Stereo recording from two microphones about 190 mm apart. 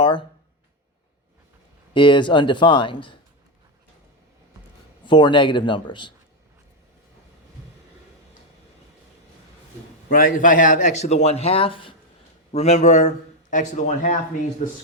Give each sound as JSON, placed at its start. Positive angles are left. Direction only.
{"t": 0.0, "sound": "a sound", "side_deg": 25}
{"t": 1.9, "sound": "speech", "side_deg": 25}
{"t": 5.0, "sound": "speech", "side_deg": 25}
{"t": 10.1, "sound": "a man's voice", "side_deg": 45}